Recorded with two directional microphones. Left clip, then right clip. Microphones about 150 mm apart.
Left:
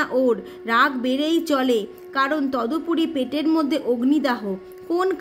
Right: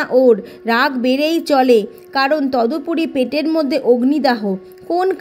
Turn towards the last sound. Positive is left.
turn(degrees=-30)  # may be behind; listen again after turning